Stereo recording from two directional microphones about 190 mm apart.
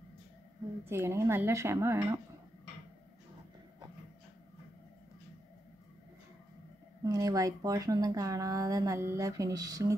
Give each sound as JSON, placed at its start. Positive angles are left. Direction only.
{"t": 0.8, "sound": "speech", "side_deg": -15}
{"t": 7.0, "sound": "speech", "side_deg": -20}